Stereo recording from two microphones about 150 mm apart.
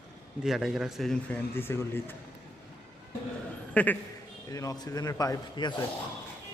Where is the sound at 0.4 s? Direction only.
5° right (ahead or behind).